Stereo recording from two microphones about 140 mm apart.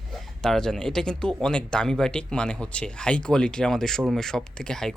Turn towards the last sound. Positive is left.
turn(degrees=5)  # may be behind; listen again after turning